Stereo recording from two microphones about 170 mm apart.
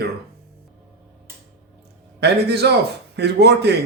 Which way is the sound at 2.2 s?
75° right (ahead or behind).